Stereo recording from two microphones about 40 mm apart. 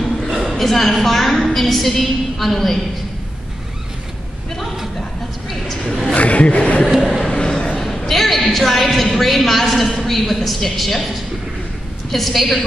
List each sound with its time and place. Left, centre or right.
0.0 s a sound: centre
0.5 s a man's voice: centre
6.1 s speech: left
7.2 s a sound: left
8.1 s a man's voice: centre
12.1 s a man's voice: centre